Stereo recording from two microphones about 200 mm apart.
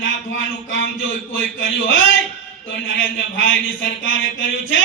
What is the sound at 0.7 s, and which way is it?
A man's voice, 75° left (ahead or behind).